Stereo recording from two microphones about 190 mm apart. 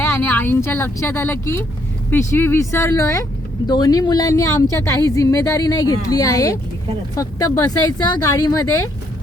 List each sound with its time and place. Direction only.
0.0 s speech: 10° left (ahead or behind)